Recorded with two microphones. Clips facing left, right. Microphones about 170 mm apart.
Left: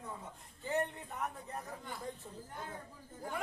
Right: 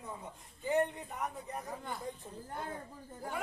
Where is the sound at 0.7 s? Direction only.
15° right (ahead or behind).